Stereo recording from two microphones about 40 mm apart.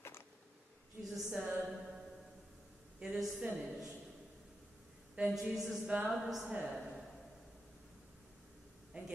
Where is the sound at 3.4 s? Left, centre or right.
Right.